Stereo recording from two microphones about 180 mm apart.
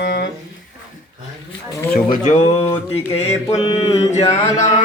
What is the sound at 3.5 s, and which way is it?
Mantra, 35° left (ahead or behind).